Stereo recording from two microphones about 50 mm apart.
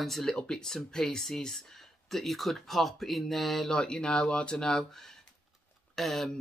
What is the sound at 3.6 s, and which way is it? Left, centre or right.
Speech, centre.